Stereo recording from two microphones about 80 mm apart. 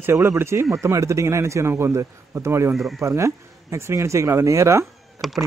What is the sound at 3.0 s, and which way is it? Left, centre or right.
Speech, right.